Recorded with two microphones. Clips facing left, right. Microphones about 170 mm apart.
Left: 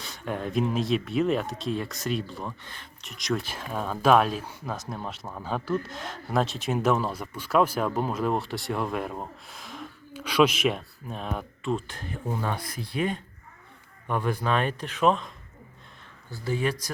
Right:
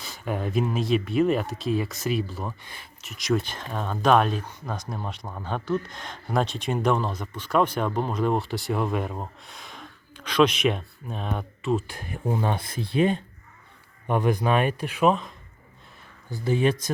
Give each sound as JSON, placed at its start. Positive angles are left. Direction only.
{"t": 0.0, "sound": "speech", "side_deg": -5}
{"t": 12.4, "sound": "speech", "side_deg": -25}
{"t": 16.3, "sound": "speech", "side_deg": -20}